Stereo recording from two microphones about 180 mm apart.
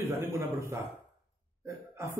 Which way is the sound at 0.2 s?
15° right (ahead or behind).